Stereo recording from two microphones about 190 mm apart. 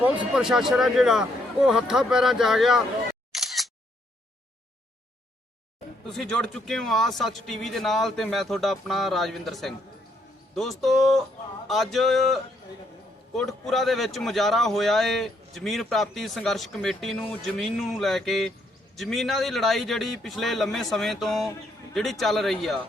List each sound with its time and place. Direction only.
0.0 s speech: 5° right (ahead or behind)
3.3 s single-lens reflex camera: centre (ahead or behind)
6.1 s speech: 5° left (ahead or behind)